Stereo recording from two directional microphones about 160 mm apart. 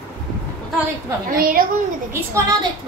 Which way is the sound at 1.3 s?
65° right (ahead or behind).